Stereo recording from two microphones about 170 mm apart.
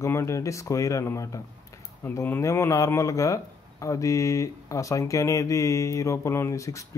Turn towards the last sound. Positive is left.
turn(degrees=20)  # may be behind; listen again after turning